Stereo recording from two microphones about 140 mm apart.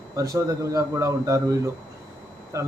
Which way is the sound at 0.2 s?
20° right (ahead or behind).